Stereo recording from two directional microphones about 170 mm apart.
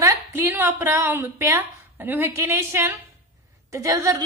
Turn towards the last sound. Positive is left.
turn(degrees=-20)  # may be behind; listen again after turning